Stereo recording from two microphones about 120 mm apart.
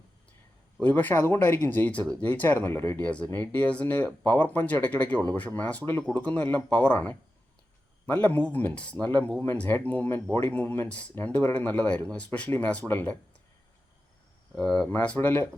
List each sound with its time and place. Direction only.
0.8 s speech: 15° left (ahead or behind)
14.5 s speech: 5° left (ahead or behind)